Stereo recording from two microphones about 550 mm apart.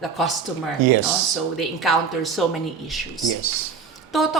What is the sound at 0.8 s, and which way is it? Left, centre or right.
Speech, right.